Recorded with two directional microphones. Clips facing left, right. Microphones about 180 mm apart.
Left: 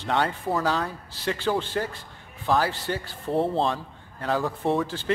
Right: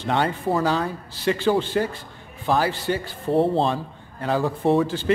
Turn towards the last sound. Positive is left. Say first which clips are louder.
# right 5 dB
turn(degrees=-5)  # may be behind; listen again after turning